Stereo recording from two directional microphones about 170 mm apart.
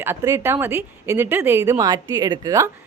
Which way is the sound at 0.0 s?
15° right (ahead or behind).